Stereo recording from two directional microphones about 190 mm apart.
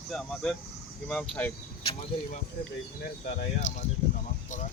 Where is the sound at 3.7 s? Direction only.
40° left (ahead or behind).